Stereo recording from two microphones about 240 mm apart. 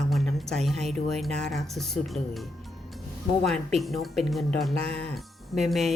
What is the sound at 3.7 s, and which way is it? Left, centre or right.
Speech, centre.